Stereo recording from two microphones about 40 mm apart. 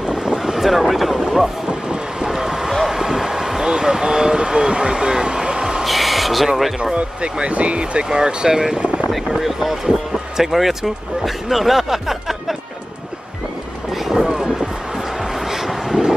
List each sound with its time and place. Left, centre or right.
0.0 s vehicle: centre
0.4 s speech: centre
1.1 s a sound: centre
1.7 s vehicle: centre
2.7 s vehicle: centre
5.9 s a sound: centre
6.8 s speech: right
8.7 s boat: right
9.1 s speech: centre
14.0 s vehicle: centre
15.3 s a sound: centre